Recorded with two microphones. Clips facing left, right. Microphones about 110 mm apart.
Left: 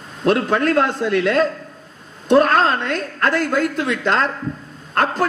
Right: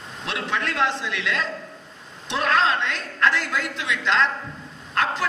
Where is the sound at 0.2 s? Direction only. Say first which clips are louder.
Left 11 dB; 45° left (ahead or behind).